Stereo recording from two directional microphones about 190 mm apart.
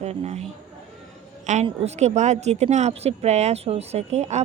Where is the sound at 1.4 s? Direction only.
35° right (ahead or behind).